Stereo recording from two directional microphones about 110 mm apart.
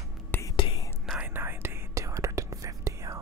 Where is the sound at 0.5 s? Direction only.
50° left (ahead or behind).